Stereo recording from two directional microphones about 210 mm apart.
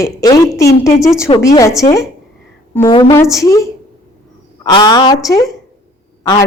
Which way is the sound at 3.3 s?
15° left (ahead or behind).